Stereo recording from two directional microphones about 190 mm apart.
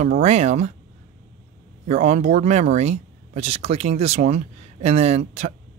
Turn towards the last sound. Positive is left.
turn(degrees=-35)  # may be behind; listen again after turning